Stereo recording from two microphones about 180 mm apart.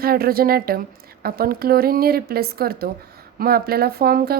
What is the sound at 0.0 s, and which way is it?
A woman's voice, 55° right (ahead or behind).